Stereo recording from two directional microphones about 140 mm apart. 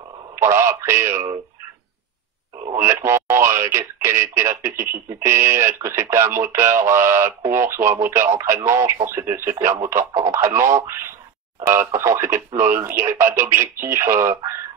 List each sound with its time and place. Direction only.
0.4 s speech: 20° right (ahead or behind)
2.7 s speech: 20° right (ahead or behind)